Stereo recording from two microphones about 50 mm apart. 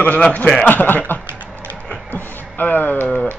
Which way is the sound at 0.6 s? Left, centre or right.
Left.